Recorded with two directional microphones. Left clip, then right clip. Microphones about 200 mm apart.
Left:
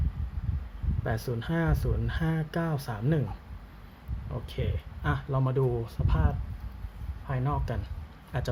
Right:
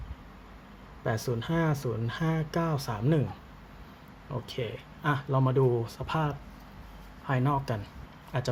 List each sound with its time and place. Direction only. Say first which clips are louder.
1.0 s speech: right 2 dB; centre (ahead or behind)
4.3 s speech: right 2 dB; 5° right (ahead or behind)
7.3 s speech: right 5 dB; 20° right (ahead or behind)
7.5 s speech: right 4 dB; 5° right (ahead or behind)